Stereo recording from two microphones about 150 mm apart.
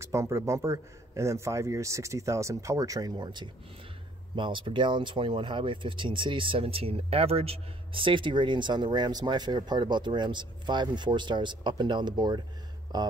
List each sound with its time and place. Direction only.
0.0 s speech: 20° right (ahead or behind)